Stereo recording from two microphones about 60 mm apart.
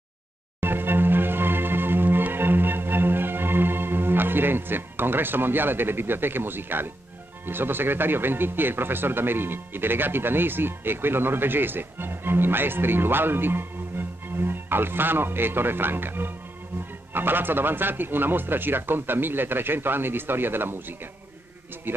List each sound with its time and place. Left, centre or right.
0.6 s music: right
7.4 s speech: right
21.9 s speech: right